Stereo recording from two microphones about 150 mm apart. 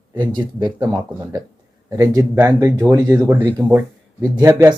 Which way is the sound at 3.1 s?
15° right (ahead or behind).